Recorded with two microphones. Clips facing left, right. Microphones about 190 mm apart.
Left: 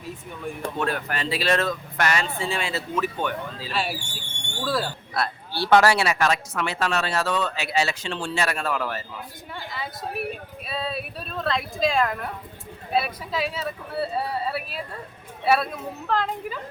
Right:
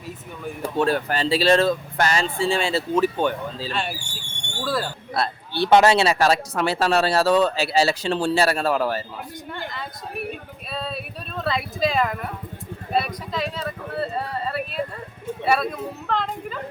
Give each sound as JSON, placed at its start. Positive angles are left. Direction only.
{"t": 0.8, "sound": "speech", "side_deg": -30}
{"t": 3.7, "sound": "speech", "side_deg": 5}
{"t": 5.1, "sound": "speech", "side_deg": -25}
{"t": 9.5, "sound": "speech", "side_deg": 5}